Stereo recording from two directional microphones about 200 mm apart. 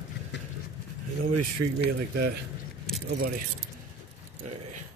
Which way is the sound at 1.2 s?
45° right (ahead or behind).